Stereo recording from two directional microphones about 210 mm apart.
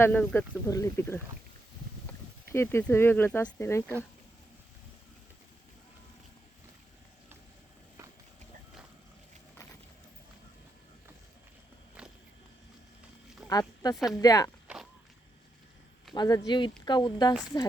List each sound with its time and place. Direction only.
0.0 s speech: 10° left (ahead or behind)
2.5 s speech: 10° left (ahead or behind)
13.5 s a sound: 20° left (ahead or behind)
13.9 s speech: centre (ahead or behind)
14.2 s speech: 15° left (ahead or behind)
16.1 s speech: 20° left (ahead or behind)